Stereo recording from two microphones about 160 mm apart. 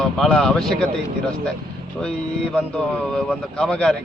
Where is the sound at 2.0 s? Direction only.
5° left (ahead or behind).